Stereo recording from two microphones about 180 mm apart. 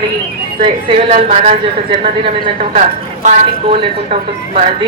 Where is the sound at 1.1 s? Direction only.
40° right (ahead or behind).